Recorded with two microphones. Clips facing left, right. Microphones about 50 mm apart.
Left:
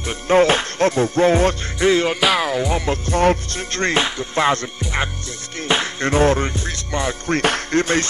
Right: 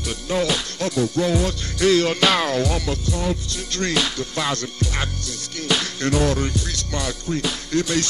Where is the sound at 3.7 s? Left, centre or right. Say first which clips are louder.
Left 3 dB; left.